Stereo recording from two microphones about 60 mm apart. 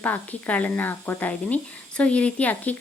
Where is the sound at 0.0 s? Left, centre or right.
Left.